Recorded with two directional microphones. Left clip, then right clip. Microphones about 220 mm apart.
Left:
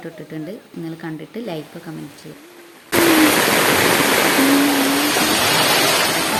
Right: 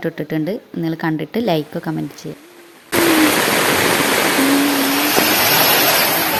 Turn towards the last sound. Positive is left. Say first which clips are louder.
# right 1 dB
turn(degrees=-45)  # may be behind; listen again after turning